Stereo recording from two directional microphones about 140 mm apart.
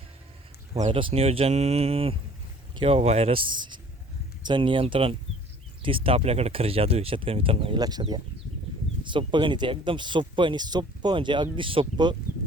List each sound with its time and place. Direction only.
0.7 s speech: 40° right (ahead or behind)
7.8 s speech: 30° right (ahead or behind)